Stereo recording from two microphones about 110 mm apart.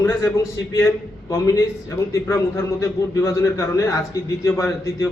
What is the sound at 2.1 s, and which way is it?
A man's voice, 25° left (ahead or behind).